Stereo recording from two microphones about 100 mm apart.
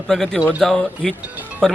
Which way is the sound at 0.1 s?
5° left (ahead or behind).